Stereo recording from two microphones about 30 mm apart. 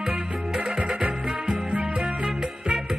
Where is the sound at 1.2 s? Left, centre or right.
Right.